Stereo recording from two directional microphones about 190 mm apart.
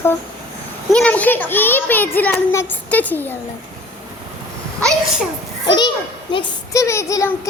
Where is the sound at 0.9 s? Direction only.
5° left (ahead or behind).